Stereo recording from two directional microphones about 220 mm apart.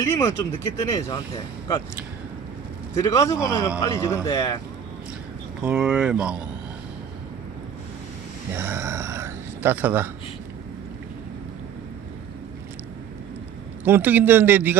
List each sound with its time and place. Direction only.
0.0 s speech: 15° left (ahead or behind)
2.9 s speech: 15° left (ahead or behind)
5.6 s speech: 5° right (ahead or behind)
8.5 s speech: 10° right (ahead or behind)
13.8 s a man's voice: 10° right (ahead or behind)